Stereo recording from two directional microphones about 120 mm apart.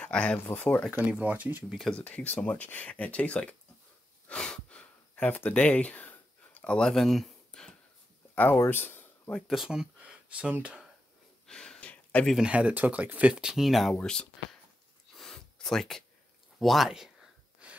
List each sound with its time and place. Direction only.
0.0 s speech: 10° left (ahead or behind)
0.9 s speech: 15° right (ahead or behind)
1.8 s speech: 10° left (ahead or behind)
4.3 s a sound: 5° left (ahead or behind)
8.5 s speech: 20° left (ahead or behind)
9.5 s speech: 5° right (ahead or behind)
11.4 s a sound: 5° left (ahead or behind)
12.4 s speech: 10° right (ahead or behind); by 14.6 s 5° left (ahead or behind)
15.1 s a sound: 5° left (ahead or behind)